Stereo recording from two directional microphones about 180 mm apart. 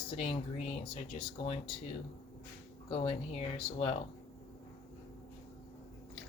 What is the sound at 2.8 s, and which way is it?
Speech, 30° left (ahead or behind).